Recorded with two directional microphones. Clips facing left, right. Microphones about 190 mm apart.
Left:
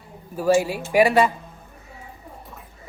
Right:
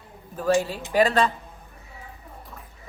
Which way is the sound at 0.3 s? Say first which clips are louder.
Left 3 dB; 10° left (ahead or behind).